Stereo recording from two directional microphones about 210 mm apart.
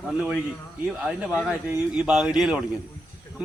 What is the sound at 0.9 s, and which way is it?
Speech, 5° right (ahead or behind).